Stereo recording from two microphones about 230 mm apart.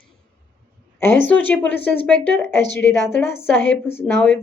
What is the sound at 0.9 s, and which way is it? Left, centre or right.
A woman's voice, centre.